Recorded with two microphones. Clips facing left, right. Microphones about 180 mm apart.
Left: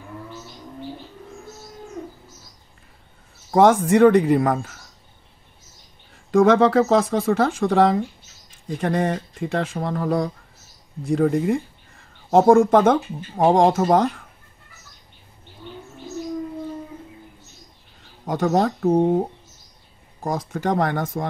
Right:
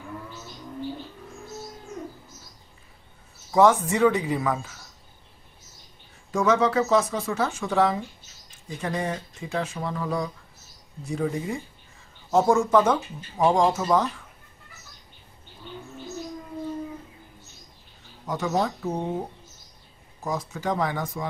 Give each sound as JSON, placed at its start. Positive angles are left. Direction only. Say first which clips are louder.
{"t": 3.5, "sound": "speech", "louder": "left 4 dB", "side_deg": 50}
{"t": 6.3, "sound": "speech", "louder": "left 7 dB", "side_deg": 55}
{"t": 18.2, "sound": "speech", "louder": "left 6 dB", "side_deg": 55}